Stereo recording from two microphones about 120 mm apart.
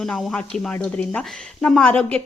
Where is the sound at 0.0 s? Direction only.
5° left (ahead or behind).